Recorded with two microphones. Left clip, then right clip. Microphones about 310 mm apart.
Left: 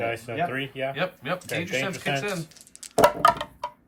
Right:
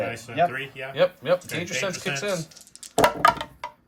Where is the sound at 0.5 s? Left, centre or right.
Left.